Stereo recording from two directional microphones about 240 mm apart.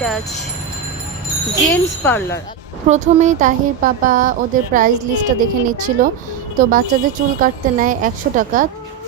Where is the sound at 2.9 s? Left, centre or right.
Right.